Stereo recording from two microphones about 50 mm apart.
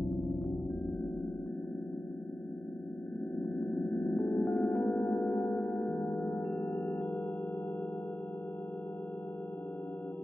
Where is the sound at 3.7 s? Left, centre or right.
Centre.